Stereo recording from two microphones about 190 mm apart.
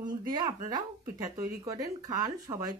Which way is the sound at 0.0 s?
20° right (ahead or behind).